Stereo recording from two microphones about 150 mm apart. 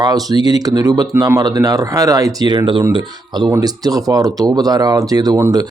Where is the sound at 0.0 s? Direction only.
25° right (ahead or behind).